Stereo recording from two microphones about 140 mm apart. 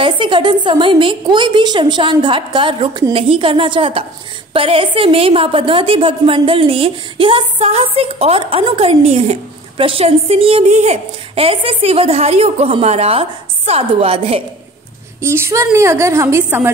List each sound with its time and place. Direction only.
0.0 s a woman's voice: 35° right (ahead or behind)
15.2 s a woman's voice: 20° right (ahead or behind)